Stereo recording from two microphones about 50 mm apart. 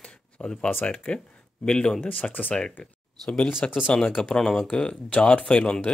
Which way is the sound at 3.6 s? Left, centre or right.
Left.